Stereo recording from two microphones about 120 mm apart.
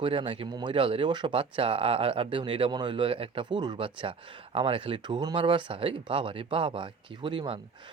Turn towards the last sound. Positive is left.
turn(degrees=-45)  # may be behind; listen again after turning